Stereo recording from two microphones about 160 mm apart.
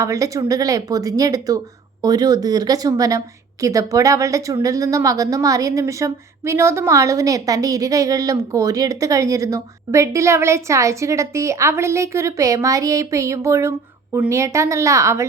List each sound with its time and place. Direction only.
0.0 s a woman's voice: 20° right (ahead or behind)